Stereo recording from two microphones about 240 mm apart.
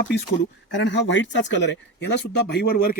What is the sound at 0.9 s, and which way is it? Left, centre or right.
Speech, left.